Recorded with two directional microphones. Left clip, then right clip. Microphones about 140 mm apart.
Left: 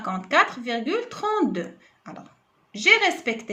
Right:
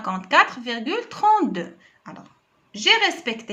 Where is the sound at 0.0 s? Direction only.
20° right (ahead or behind).